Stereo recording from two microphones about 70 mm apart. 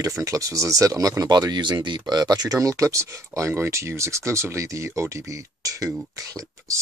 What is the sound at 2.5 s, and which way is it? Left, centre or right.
Speech, right.